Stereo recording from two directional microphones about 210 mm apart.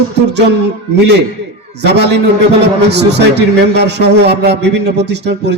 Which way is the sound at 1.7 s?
55° right (ahead or behind).